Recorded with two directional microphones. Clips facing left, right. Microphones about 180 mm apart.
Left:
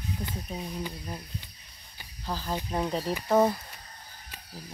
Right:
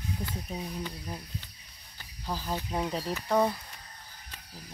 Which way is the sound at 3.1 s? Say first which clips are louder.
Left 3 dB; 5° left (ahead or behind).